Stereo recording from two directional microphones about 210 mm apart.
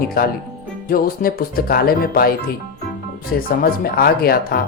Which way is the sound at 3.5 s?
45° left (ahead or behind).